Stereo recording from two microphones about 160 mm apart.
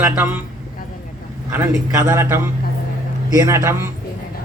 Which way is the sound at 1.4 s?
15° right (ahead or behind).